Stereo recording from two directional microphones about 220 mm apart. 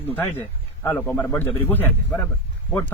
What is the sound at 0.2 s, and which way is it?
A man's voice, 10° left (ahead or behind).